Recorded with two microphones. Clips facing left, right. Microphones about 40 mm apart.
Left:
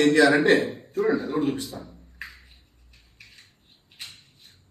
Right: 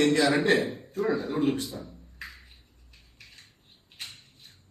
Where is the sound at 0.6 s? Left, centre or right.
Centre.